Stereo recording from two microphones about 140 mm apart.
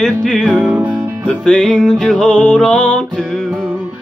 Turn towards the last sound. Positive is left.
turn(degrees=5)  # may be behind; listen again after turning